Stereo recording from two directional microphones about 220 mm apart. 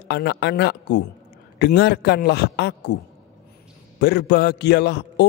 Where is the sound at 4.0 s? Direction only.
50° left (ahead or behind).